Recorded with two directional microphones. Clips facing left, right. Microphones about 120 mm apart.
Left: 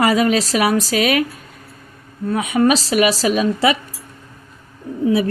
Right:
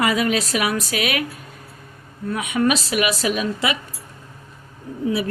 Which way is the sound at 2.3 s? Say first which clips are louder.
Left 5 dB; 35° left (ahead or behind).